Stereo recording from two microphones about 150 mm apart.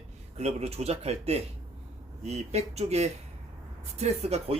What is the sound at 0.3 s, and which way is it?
Speech, 45° right (ahead or behind).